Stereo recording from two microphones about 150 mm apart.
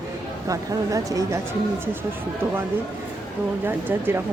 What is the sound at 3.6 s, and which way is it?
Speech, 15° right (ahead or behind).